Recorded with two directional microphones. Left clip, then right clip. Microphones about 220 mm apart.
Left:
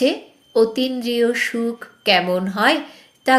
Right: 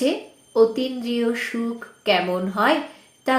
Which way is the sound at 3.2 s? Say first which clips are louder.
Left 6 dB; 40° left (ahead or behind).